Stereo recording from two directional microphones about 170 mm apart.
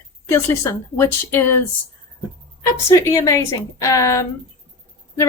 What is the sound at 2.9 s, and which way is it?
A woman's voice, 20° left (ahead or behind).